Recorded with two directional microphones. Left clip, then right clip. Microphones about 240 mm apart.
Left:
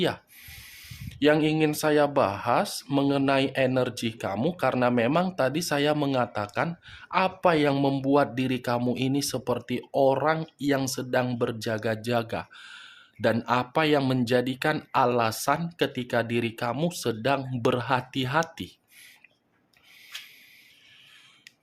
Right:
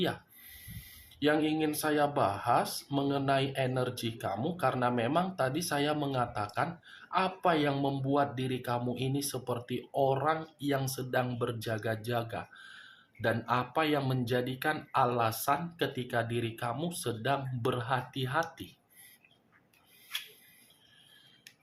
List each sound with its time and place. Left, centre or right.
1.2 s speech: left